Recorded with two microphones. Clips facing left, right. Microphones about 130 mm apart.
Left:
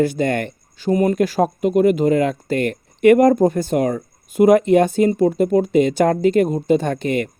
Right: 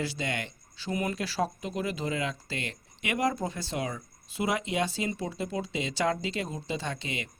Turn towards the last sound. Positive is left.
turn(degrees=55)  # may be behind; listen again after turning